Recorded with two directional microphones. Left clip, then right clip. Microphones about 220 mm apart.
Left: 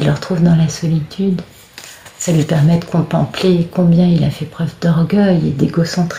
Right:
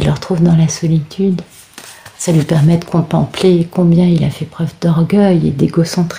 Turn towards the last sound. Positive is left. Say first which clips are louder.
# right 2 dB
turn(degrees=-35)  # may be behind; listen again after turning